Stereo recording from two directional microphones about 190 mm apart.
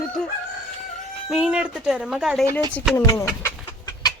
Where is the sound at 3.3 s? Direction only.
15° left (ahead or behind).